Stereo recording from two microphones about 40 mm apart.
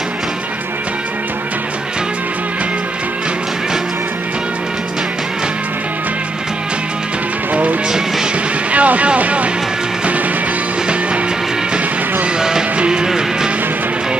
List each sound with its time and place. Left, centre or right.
8.7 s vehicle: right
12.4 s music: centre